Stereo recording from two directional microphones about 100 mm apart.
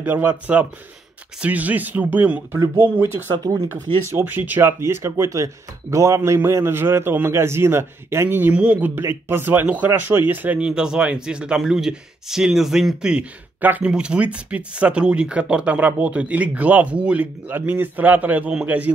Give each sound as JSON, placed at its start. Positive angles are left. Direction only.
{"t": 0.0, "sound": "speech", "side_deg": -20}